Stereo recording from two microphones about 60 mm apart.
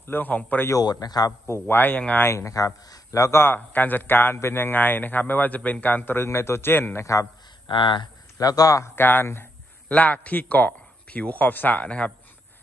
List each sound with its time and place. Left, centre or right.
0.0 s a man's voice: left
0.7 s a man's voice: left
1.5 s a man's voice: left
2.3 s a man's voice: left
3.3 s a man's voice: left
6.1 s a man's voice: left
8.4 s a man's voice: left
8.8 s a man's voice: left
9.8 s a man's voice: left